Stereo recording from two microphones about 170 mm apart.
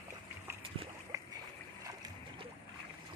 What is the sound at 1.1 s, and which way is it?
Boat, 20° right (ahead or behind).